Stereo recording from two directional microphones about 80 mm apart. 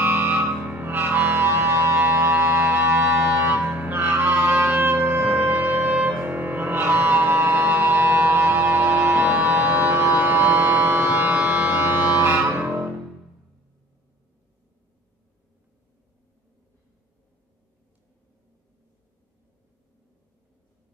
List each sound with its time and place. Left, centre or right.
0.0 s music: right